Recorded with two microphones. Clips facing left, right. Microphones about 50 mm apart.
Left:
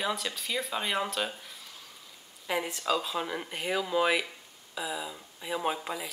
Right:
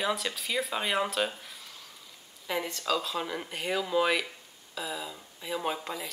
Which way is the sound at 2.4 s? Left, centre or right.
Centre.